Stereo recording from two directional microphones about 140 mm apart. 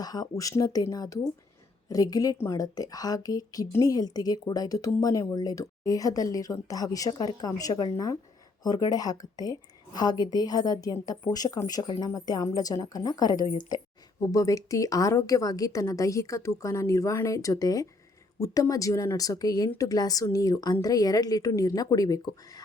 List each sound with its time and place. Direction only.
0.0 s a woman's voice: 25° left (ahead or behind)